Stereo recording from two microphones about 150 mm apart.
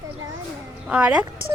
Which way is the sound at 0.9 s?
10° right (ahead or behind).